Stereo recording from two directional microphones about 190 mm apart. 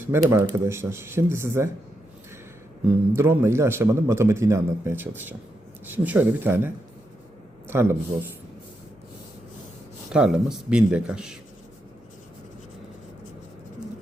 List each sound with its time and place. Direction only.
0.1 s a man's voice: 15° right (ahead or behind)
3.2 s a man's voice: 15° right (ahead or behind)
7.7 s a man's voice: 10° right (ahead or behind)
10.1 s speech: 5° right (ahead or behind)